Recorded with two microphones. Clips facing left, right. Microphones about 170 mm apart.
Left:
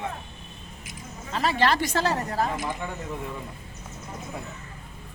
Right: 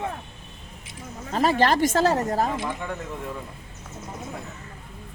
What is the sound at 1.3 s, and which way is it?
Speech, 45° right (ahead or behind).